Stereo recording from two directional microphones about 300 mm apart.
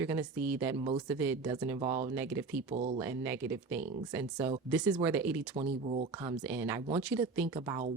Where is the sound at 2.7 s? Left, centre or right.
Right.